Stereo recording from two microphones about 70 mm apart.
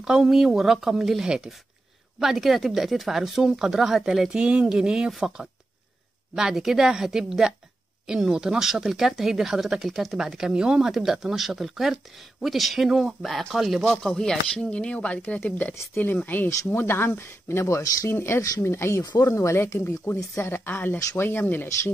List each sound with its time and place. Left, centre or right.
0.0 s a woman's voice: centre; by 19.0 s left
19.0 s speech: left
20.4 s speech: left